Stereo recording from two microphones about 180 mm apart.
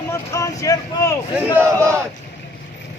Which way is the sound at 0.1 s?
20° left (ahead or behind).